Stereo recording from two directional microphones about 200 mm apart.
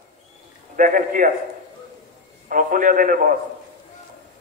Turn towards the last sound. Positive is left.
turn(degrees=-45)  # may be behind; listen again after turning